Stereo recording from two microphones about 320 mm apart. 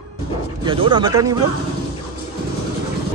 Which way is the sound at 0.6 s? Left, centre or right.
Centre.